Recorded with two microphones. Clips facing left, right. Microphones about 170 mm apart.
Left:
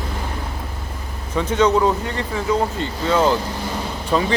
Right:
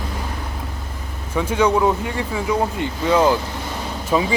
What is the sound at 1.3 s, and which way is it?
Speech, 10° right (ahead or behind).